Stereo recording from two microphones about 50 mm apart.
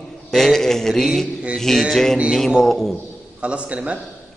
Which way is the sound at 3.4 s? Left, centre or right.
Right.